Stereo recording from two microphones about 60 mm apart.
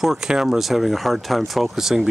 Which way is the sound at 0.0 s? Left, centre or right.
Centre.